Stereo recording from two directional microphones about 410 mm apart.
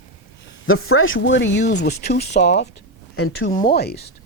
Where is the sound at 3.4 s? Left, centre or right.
Centre.